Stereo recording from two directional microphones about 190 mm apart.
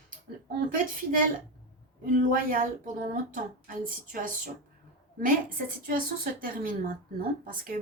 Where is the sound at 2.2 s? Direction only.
45° right (ahead or behind).